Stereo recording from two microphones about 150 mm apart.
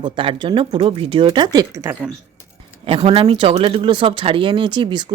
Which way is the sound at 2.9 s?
35° right (ahead or behind).